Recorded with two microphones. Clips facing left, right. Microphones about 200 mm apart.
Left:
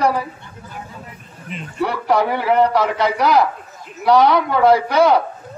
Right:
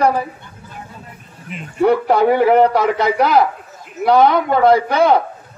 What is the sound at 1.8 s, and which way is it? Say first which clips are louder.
A man's voice: right 5 dB; 50° right (ahead or behind).